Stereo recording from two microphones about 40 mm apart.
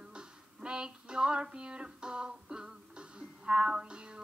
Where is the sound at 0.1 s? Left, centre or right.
Right.